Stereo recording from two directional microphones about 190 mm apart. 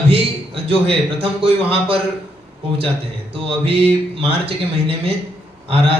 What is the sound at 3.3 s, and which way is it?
A man's voice, 30° right (ahead or behind).